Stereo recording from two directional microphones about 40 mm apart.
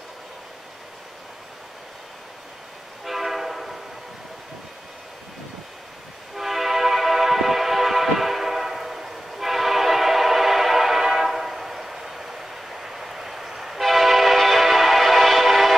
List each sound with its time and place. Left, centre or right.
3.1 s train horn: centre
6.3 s music: centre